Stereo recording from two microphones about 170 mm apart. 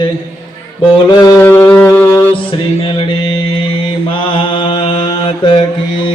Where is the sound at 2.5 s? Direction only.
30° left (ahead or behind).